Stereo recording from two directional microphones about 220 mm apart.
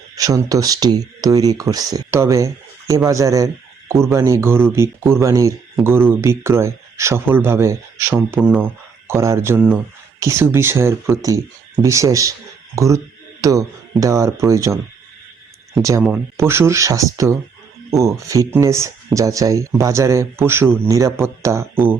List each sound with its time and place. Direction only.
0.2 s a man's voice: 15° right (ahead or behind)